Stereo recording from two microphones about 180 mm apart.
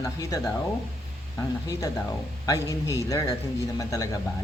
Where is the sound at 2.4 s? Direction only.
15° left (ahead or behind).